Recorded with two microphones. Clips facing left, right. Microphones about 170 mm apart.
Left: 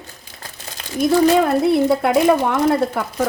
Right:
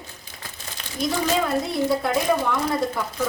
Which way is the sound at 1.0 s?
55° left (ahead or behind).